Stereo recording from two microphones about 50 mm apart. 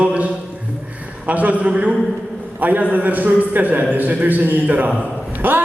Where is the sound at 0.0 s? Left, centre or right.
Right.